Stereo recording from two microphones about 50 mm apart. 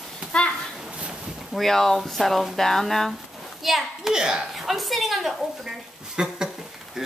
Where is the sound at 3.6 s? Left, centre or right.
Centre.